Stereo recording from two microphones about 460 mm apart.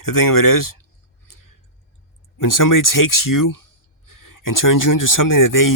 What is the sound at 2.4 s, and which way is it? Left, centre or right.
Speech, left.